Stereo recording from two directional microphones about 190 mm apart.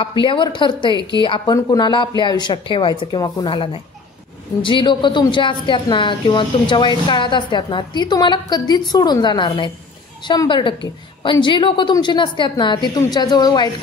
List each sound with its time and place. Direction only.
0.0 s a woman's voice: 25° left (ahead or behind)